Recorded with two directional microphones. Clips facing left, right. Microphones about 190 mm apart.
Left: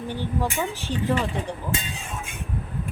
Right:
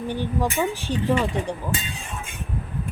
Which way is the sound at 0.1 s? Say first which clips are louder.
Right 2 dB; 15° right (ahead or behind).